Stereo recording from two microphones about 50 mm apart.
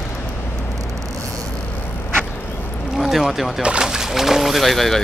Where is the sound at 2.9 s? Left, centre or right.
Centre.